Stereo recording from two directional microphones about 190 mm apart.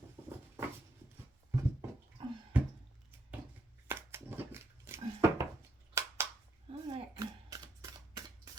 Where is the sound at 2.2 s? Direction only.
25° right (ahead or behind).